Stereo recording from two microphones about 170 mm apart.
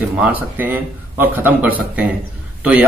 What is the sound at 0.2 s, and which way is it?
Speech, 10° right (ahead or behind).